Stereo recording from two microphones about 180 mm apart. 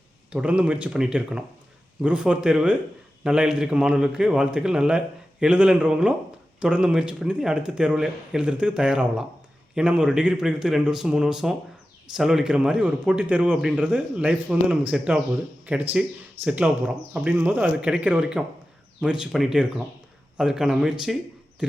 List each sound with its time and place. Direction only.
0.3 s a man's voice: 5° right (ahead or behind)